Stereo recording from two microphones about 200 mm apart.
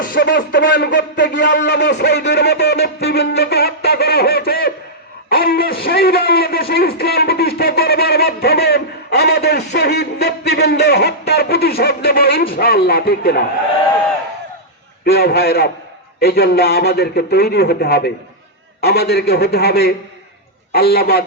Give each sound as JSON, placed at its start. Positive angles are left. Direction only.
{"t": 0.2, "sound": "a man's voice", "side_deg": 60}
{"t": 15.0, "sound": "a man's voice", "side_deg": 50}